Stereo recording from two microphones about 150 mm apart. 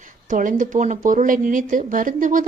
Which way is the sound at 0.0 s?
60° right (ahead or behind).